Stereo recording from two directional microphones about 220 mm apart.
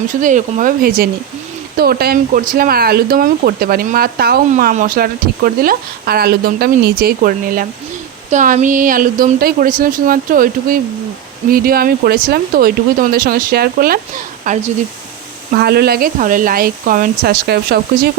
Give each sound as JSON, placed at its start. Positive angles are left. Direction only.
{"t": 0.1, "sound": "speech", "side_deg": -35}
{"t": 15.5, "sound": "speech", "side_deg": -45}